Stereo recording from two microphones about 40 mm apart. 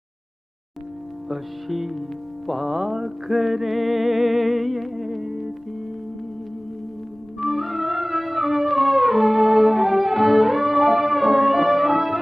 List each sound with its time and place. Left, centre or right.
1.3 s music: centre
7.3 s music: centre